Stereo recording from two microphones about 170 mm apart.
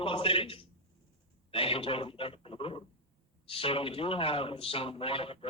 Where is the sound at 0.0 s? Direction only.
35° left (ahead or behind).